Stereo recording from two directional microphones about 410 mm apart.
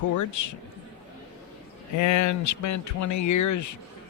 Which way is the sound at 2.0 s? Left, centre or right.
Left.